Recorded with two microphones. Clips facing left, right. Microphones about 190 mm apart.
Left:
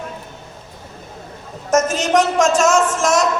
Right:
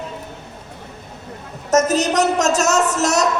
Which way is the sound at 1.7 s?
40° right (ahead or behind).